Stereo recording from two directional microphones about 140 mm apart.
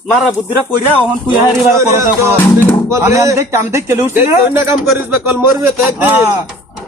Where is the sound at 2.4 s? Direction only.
10° left (ahead or behind).